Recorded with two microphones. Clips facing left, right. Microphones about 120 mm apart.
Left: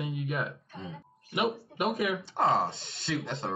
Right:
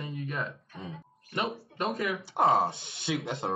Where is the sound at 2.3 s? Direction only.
25° right (ahead or behind).